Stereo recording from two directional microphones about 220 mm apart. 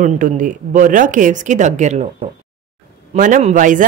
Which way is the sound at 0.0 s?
35° right (ahead or behind).